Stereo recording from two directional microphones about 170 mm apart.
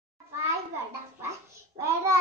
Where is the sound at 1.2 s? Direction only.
15° right (ahead or behind).